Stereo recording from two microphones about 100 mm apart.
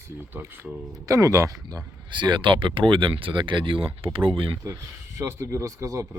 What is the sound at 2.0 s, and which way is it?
Speech, 50° right (ahead or behind).